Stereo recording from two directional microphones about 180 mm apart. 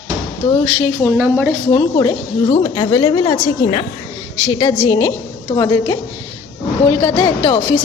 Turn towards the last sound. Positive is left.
turn(degrees=20)  # may be behind; listen again after turning